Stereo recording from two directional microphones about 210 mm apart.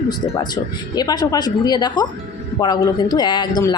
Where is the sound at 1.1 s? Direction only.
20° left (ahead or behind).